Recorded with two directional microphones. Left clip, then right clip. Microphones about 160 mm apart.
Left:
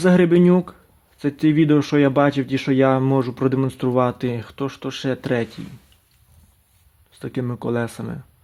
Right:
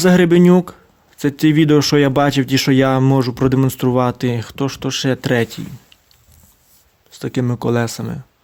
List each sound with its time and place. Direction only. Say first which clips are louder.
0.0 s speech: right 3 dB; 25° right (ahead or behind)
7.1 s speech: right 6 dB; 25° right (ahead or behind)